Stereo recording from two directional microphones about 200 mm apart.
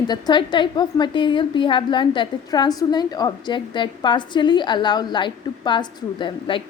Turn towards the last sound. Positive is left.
turn(degrees=25)  # may be behind; listen again after turning